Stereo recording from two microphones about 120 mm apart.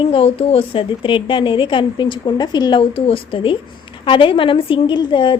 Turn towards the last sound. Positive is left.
turn(degrees=45)  # may be behind; listen again after turning